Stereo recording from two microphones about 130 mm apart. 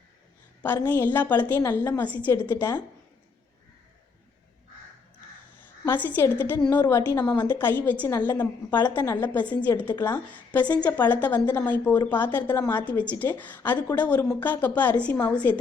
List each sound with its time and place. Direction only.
0.9 s a woman's voice: 15° left (ahead or behind)
5.8 s a woman's voice: 15° left (ahead or behind)